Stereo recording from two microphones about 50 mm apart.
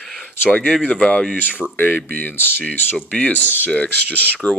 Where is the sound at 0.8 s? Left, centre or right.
Left.